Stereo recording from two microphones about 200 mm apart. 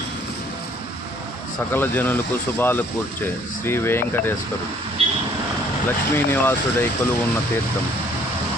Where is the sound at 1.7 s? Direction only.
10° left (ahead or behind).